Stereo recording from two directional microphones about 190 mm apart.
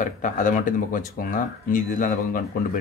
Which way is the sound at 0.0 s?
45° left (ahead or behind).